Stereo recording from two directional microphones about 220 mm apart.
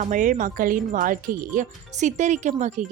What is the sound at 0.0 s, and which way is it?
Speech, 35° right (ahead or behind).